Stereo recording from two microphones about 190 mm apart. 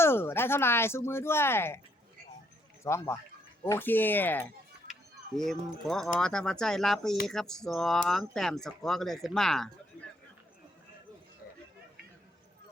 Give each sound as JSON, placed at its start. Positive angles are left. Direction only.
{"t": 0.0, "sound": "speech", "side_deg": 10}
{"t": 2.8, "sound": "speech", "side_deg": 15}